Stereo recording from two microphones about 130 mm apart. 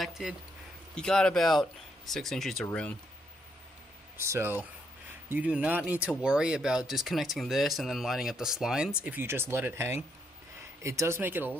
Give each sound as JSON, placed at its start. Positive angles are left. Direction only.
{"t": 0.0, "sound": "speech", "side_deg": -5}
{"t": 4.2, "sound": "speech", "side_deg": -20}